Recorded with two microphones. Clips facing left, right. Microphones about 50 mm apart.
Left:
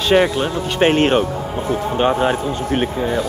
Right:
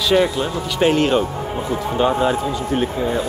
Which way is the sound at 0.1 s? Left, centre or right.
Left.